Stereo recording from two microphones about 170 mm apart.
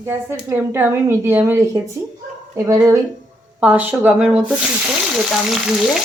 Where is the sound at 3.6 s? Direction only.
10° right (ahead or behind).